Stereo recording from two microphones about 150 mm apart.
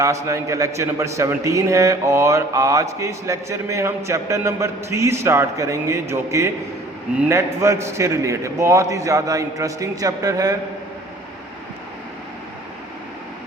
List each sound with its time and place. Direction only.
0.0 s a man's voice: 20° right (ahead or behind)